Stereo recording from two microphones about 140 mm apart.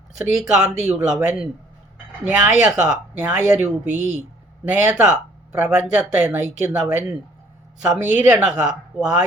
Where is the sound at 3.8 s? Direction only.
60° right (ahead or behind).